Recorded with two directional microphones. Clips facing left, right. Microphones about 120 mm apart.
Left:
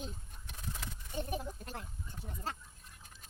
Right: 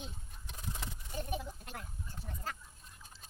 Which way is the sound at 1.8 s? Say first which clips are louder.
Even; 25° left (ahead or behind).